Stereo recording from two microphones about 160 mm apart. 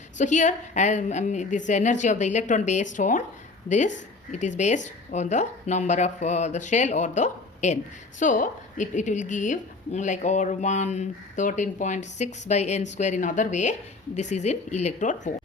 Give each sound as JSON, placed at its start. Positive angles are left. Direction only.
{"t": 0.2, "sound": "a woman's voice", "side_deg": 50}